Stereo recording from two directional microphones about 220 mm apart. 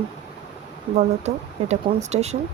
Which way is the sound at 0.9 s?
30° right (ahead or behind).